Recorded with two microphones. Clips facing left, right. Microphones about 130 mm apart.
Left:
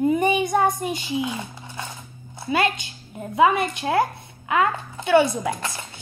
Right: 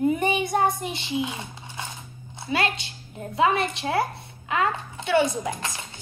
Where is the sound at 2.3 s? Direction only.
50° left (ahead or behind).